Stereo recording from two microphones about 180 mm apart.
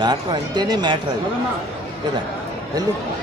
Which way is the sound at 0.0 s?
25° right (ahead or behind).